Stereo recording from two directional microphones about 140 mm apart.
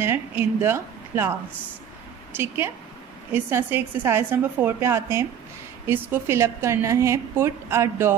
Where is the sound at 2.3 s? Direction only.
15° right (ahead or behind).